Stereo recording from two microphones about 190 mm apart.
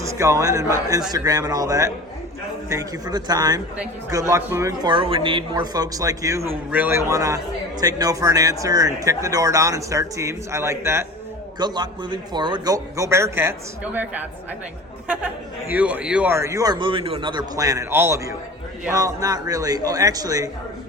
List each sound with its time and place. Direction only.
0.0 s speech: 15° right (ahead or behind)